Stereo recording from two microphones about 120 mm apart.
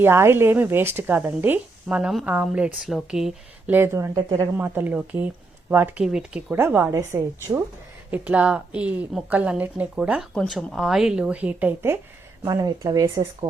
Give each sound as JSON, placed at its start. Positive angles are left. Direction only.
{"t": 0.0, "sound": "a woman's voice", "side_deg": -20}
{"t": 3.7, "sound": "a woman's voice", "side_deg": -20}
{"t": 8.1, "sound": "a woman's voice", "side_deg": -10}
{"t": 12.5, "sound": "a woman's voice", "side_deg": -30}